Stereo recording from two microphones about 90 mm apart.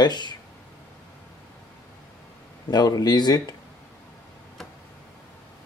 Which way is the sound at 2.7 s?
50° left (ahead or behind).